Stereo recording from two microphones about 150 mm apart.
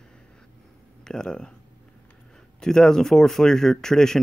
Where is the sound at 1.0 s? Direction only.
5° left (ahead or behind).